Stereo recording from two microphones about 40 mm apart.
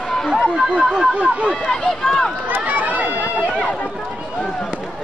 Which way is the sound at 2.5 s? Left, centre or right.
Right.